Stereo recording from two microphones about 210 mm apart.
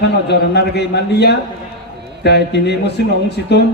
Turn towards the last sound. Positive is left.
turn(degrees=55)  # may be behind; listen again after turning